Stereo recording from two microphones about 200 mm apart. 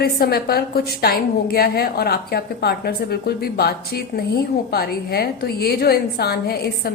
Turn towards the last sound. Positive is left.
turn(degrees=50)  # may be behind; listen again after turning